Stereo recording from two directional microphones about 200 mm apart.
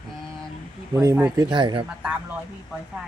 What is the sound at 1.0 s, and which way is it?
Speech, 10° right (ahead or behind).